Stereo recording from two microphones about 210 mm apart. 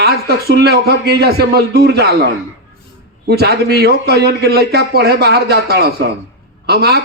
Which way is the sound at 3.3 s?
50° right (ahead or behind).